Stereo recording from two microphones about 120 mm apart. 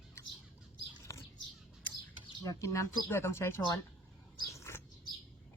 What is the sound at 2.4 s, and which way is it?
Speech, 25° left (ahead or behind).